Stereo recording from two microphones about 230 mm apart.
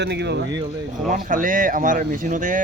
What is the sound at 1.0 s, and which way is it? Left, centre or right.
Speech, right.